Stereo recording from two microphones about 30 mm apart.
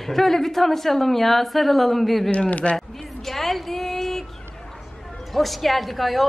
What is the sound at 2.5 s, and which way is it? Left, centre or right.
Speech, left.